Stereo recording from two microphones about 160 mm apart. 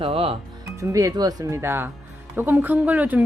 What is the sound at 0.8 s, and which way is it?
Speech, 20° right (ahead or behind).